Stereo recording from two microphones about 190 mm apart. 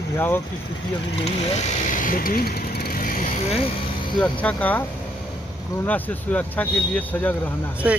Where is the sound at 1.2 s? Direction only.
40° left (ahead or behind).